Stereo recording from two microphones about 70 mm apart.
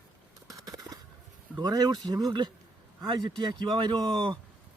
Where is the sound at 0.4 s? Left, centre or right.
Right.